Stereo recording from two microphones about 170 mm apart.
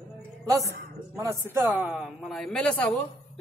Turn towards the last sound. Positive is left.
turn(degrees=5)  # may be behind; listen again after turning